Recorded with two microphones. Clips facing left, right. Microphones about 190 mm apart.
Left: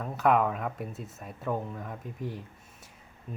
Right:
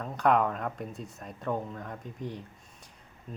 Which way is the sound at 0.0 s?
5° left (ahead or behind).